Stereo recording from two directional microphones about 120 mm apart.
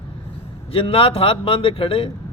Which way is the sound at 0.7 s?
50° left (ahead or behind).